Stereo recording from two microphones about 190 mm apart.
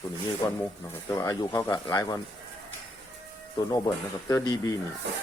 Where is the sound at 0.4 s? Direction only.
10° left (ahead or behind).